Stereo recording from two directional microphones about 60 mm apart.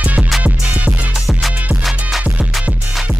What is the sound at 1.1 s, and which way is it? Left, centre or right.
Music, centre.